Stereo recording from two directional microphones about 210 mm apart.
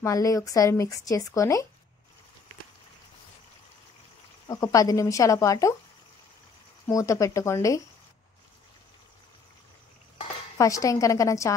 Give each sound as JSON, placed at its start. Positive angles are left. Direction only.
{"t": 0.0, "sound": "speech", "side_deg": 15}
{"t": 4.5, "sound": "speech", "side_deg": 15}
{"t": 6.9, "sound": "speech", "side_deg": 15}
{"t": 10.6, "sound": "speech", "side_deg": 15}